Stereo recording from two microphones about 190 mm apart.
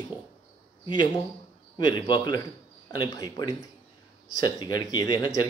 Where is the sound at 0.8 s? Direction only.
25° left (ahead or behind).